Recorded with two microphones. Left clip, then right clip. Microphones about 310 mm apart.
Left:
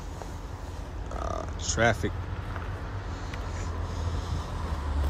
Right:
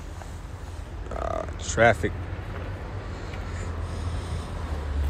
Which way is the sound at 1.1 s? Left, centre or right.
Centre.